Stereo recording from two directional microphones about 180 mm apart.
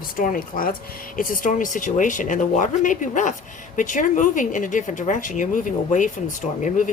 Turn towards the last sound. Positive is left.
turn(degrees=45)  # may be behind; listen again after turning